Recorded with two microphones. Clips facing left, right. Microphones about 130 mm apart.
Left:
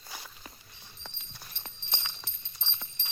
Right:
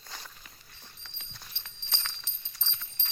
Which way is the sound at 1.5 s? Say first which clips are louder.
Left 5 dB; 45° left (ahead or behind).